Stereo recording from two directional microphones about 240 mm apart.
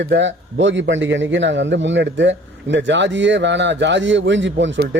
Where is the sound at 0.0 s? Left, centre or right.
Right.